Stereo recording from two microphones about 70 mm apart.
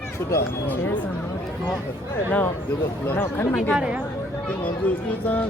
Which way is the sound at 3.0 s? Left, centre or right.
Left.